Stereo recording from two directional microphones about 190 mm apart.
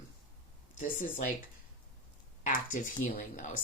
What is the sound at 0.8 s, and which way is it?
Speech, 45° left (ahead or behind).